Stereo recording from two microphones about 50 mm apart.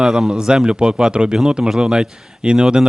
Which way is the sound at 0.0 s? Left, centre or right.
Centre.